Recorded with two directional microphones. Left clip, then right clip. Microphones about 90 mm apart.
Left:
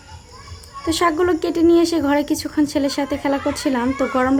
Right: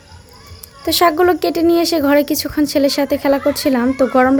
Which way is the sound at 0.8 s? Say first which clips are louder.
Right 5 dB; 35° right (ahead or behind).